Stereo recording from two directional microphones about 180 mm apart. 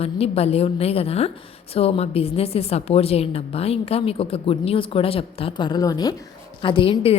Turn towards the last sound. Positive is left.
turn(degrees=30)  # may be behind; listen again after turning